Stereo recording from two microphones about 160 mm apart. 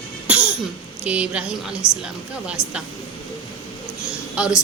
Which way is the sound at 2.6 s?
15° left (ahead or behind).